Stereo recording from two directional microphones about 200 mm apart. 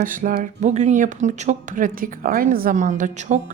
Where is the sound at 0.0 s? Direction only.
40° right (ahead or behind).